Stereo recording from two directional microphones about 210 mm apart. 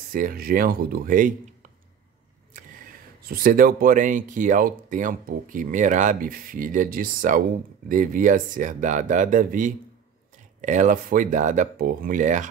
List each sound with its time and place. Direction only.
0.1 s speech: 40° right (ahead or behind)
2.5 s a sound: 40° right (ahead or behind)
3.3 s speech: 45° right (ahead or behind)